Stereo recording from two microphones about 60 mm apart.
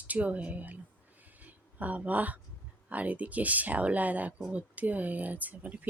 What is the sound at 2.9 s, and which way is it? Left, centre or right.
Speech, right.